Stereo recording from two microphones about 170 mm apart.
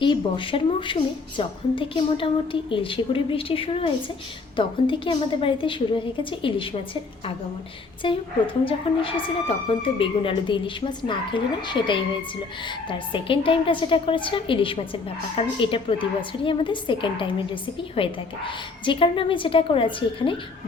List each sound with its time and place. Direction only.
0.0 s a woman's voice: 30° left (ahead or behind)